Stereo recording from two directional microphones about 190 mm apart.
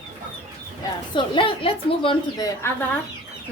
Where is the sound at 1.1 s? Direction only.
25° left (ahead or behind).